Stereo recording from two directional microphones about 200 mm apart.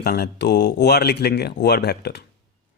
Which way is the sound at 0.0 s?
50° left (ahead or behind).